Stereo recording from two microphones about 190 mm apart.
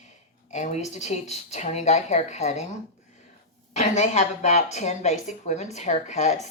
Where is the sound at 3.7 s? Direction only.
40° left (ahead or behind).